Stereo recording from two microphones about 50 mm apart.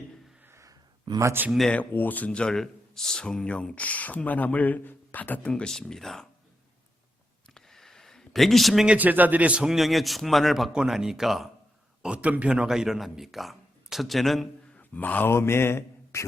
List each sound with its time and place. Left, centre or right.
1.4 s speech: right
1.7 s speech: left
2.3 s speech: centre
2.6 s speech: centre
3.8 s speech: left
5.5 s speech: centre
7.5 s a sound: centre
9.0 s speech: right
9.7 s speech: centre
10.7 s speech: centre
12.0 s speech: right
12.5 s speech: centre
14.8 s a sound: left
15.3 s speech: left